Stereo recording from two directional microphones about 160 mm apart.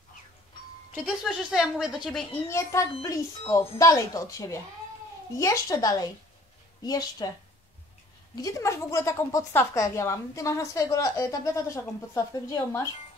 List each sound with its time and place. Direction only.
1.0 s speech: centre (ahead or behind)
2.4 s speech: 20° left (ahead or behind)
8.4 s speech: 20° left (ahead or behind)